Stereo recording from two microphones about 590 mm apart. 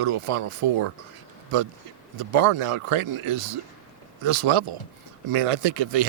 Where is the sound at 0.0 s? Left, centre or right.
Right.